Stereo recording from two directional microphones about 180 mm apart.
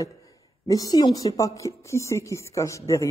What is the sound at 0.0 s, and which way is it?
A woman's voice, 20° left (ahead or behind).